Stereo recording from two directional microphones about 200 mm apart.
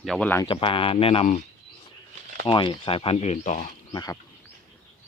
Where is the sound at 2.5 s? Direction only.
25° left (ahead or behind).